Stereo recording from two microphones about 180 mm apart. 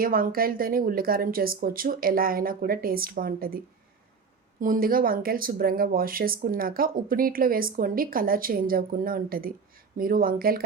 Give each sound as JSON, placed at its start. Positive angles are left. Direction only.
{"t": 0.0, "sound": "speech", "side_deg": -55}
{"t": 4.6, "sound": "speech", "side_deg": -50}